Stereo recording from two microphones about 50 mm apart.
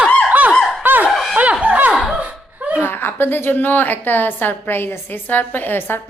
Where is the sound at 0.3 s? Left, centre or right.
Right.